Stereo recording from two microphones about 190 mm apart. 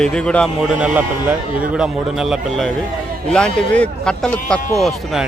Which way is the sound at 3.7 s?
5° left (ahead or behind).